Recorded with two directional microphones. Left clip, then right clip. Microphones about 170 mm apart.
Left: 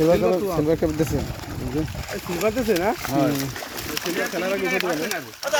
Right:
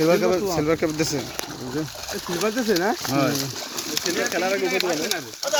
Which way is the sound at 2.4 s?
50° right (ahead or behind).